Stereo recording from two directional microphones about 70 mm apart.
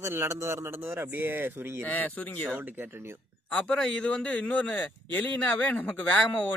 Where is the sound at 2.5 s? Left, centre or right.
Right.